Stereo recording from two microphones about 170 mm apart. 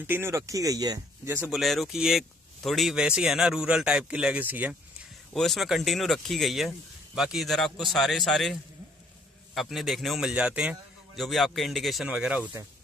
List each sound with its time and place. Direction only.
0.0 s speech: 15° right (ahead or behind)
1.5 s speech: centre (ahead or behind)
5.3 s speech: centre (ahead or behind)